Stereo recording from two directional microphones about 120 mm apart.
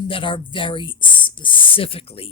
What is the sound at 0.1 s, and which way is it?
Speech, 45° left (ahead or behind).